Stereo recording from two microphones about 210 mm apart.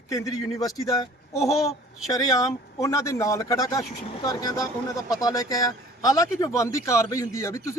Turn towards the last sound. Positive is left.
turn(degrees=15)  # may be behind; listen again after turning